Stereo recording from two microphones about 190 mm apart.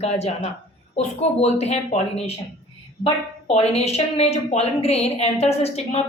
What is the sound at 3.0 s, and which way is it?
A woman's voice, 35° left (ahead or behind).